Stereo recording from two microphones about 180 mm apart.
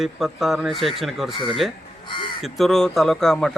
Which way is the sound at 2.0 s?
25° left (ahead or behind).